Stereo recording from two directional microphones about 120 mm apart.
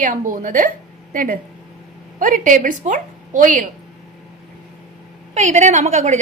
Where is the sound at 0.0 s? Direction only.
90° right.